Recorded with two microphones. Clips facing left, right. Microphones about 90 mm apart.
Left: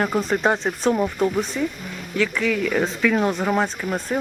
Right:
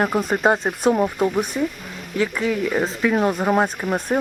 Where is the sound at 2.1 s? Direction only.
30° right (ahead or behind).